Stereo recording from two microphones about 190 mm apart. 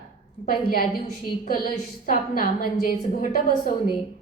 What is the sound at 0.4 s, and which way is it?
Speech, 50° left (ahead or behind).